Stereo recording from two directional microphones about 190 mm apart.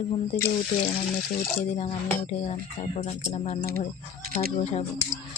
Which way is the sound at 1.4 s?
30° left (ahead or behind).